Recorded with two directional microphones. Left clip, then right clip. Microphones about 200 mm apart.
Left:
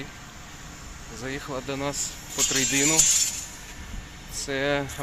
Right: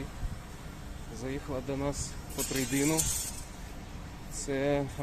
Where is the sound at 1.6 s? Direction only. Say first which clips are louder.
Left 5 dB; 5° left (ahead or behind).